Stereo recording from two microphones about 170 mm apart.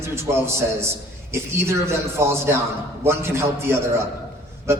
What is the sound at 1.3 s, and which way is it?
A man's voice, 15° right (ahead or behind).